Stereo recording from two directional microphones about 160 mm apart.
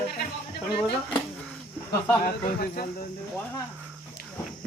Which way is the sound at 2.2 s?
70° left (ahead or behind).